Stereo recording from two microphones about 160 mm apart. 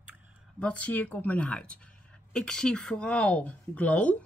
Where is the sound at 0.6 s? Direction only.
10° left (ahead or behind).